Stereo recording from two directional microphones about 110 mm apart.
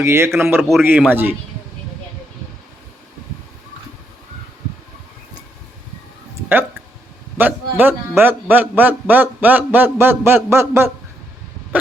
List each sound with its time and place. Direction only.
0.0 s a man's voice: 25° right (ahead or behind)
7.3 s a man's voice: 15° right (ahead or behind)